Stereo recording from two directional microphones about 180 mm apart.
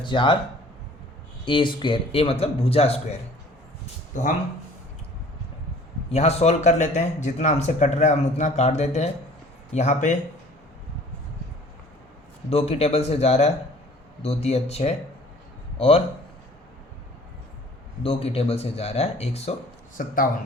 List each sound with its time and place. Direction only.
0.0 s speech: 25° left (ahead or behind)
1.5 s speech: 25° left (ahead or behind); by 4.3 s 45° left (ahead or behind)
6.1 s speech: 35° left (ahead or behind)
12.5 s speech: 35° left (ahead or behind)
18.0 s speech: 35° left (ahead or behind)
20.0 s speech: 50° left (ahead or behind)